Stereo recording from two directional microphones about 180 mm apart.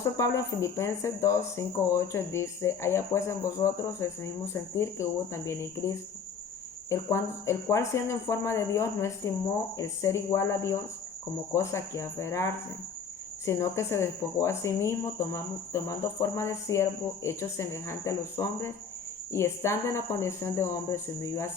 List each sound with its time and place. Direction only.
0.0 s speech: 15° left (ahead or behind)